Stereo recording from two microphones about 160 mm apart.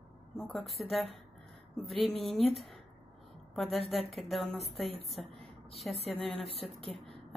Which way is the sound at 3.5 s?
Centre (ahead or behind).